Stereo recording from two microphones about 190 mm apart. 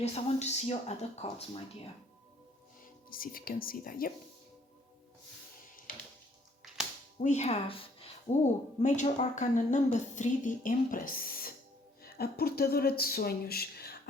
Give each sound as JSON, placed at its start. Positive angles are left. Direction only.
{"t": 0.0, "sound": "a woman's voice", "side_deg": 35}
{"t": 3.1, "sound": "speech", "side_deg": 50}
{"t": 7.2, "sound": "speech", "side_deg": 40}
{"t": 8.8, "sound": "a woman's voice", "side_deg": 40}